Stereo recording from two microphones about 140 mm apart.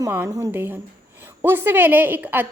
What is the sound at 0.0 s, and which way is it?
A woman's voice, 20° right (ahead or behind).